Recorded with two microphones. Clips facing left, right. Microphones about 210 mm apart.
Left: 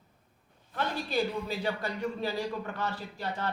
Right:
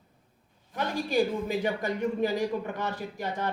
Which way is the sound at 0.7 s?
15° right (ahead or behind).